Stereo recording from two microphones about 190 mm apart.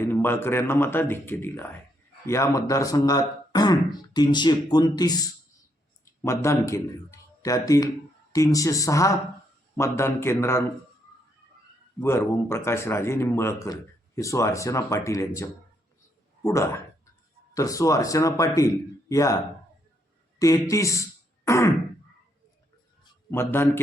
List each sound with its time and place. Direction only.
0.0 s a man's voice: 10° left (ahead or behind)
11.9 s a man's voice: 15° left (ahead or behind)
20.4 s speech: 15° left (ahead or behind)
23.3 s a man's voice: 10° left (ahead or behind)